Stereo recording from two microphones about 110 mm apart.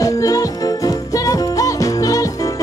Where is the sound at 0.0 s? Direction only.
30° left (ahead or behind).